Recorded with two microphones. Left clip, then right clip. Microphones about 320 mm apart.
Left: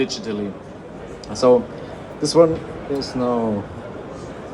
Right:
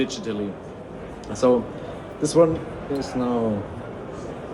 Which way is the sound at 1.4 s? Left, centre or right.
Left.